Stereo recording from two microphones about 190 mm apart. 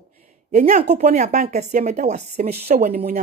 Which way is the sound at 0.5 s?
40° right (ahead or behind).